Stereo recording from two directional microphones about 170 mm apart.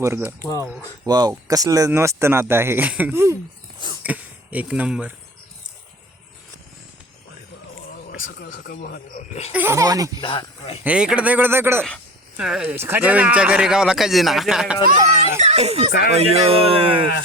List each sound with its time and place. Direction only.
0.0 s speech: 15° right (ahead or behind)
7.9 s a man's voice: 65° left (ahead or behind)
9.5 s speech: 10° right (ahead or behind)
10.2 s speech: 30° left (ahead or behind)
10.8 s a man's voice: 5° right (ahead or behind)
15.4 s speech: 40° right (ahead or behind)
15.9 s speech: 65° left (ahead or behind)
16.1 s speech: 35° right (ahead or behind)